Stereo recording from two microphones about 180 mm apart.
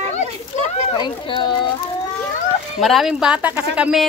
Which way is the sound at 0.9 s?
25° left (ahead or behind).